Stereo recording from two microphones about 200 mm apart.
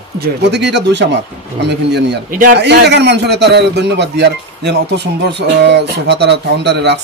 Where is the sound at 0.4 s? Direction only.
60° right (ahead or behind).